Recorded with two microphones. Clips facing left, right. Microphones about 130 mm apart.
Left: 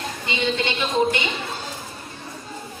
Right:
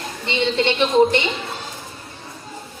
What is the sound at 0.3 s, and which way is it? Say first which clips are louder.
Speech: right 4 dB; 30° right (ahead or behind).